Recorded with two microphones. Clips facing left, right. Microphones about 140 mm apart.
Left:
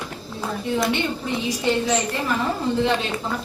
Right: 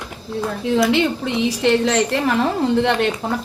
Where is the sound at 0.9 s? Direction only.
90° right.